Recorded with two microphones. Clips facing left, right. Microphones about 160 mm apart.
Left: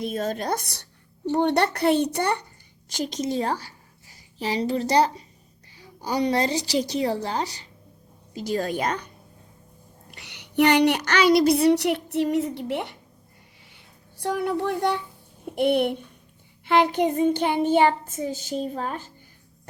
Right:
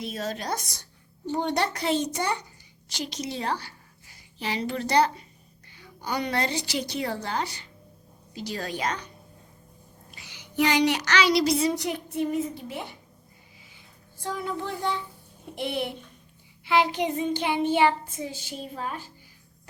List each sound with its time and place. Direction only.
0.0 s child singing: 50° left (ahead or behind)
1.3 s a child's voice: 60° left (ahead or behind)
2.9 s child singing: 45° left (ahead or behind)
4.4 s a woman's voice: 35° left (ahead or behind)
8.4 s child singing: 45° left (ahead or behind)
10.1 s a woman's voice: 70° left (ahead or behind)
13.7 s a sound: 65° left (ahead or behind)
15.5 s a child's voice: 55° left (ahead or behind)
16.6 s child singing: 50° left (ahead or behind)